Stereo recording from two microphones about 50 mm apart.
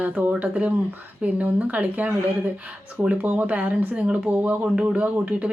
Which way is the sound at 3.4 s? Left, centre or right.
Right.